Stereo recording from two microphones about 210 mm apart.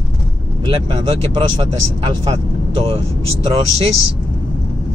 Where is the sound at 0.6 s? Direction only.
25° right (ahead or behind).